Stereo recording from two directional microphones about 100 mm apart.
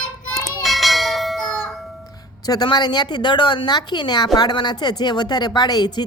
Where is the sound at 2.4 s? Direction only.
45° left (ahead or behind).